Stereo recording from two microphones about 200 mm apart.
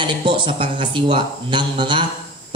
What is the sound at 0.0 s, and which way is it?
A man's voice, 25° right (ahead or behind).